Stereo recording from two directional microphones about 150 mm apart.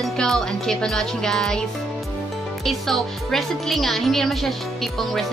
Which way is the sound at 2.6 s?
Centre (ahead or behind).